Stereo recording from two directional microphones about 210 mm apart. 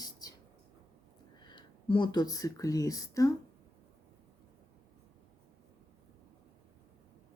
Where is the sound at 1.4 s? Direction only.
20° left (ahead or behind).